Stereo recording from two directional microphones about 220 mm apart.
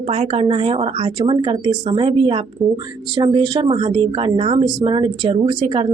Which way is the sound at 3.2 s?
20° right (ahead or behind).